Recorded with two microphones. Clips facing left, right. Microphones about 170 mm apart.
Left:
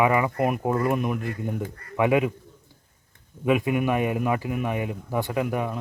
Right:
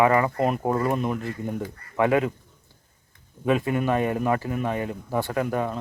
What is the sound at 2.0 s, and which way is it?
Speech, 15° left (ahead or behind).